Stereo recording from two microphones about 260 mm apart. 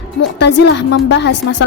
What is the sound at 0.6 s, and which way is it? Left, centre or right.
Speech, left.